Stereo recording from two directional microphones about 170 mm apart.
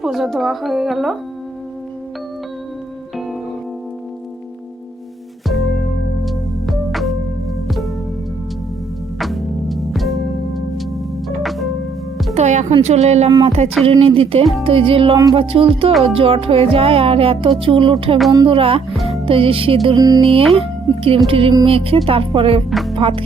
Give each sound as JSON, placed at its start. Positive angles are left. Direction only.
{"t": 0.0, "sound": "speech", "side_deg": 0}
{"t": 5.5, "sound": "music", "side_deg": 0}
{"t": 9.1, "sound": "music", "side_deg": 0}
{"t": 12.3, "sound": "music", "side_deg": -45}
{"t": 12.8, "sound": "speech", "side_deg": -40}
{"t": 20.0, "sound": "music", "side_deg": -20}
{"t": 20.5, "sound": "speech", "side_deg": -35}
{"t": 22.7, "sound": "music", "side_deg": 0}
{"t": 23.0, "sound": "speech", "side_deg": -30}